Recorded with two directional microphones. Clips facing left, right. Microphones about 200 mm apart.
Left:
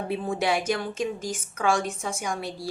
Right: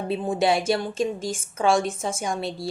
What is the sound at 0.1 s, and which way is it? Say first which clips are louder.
A woman's voice: right 4 dB; 25° right (ahead or behind).